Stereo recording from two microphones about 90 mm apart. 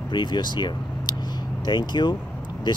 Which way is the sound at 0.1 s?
60° left (ahead or behind).